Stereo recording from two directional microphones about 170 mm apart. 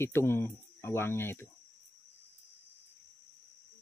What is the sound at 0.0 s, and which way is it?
Speech, 15° left (ahead or behind).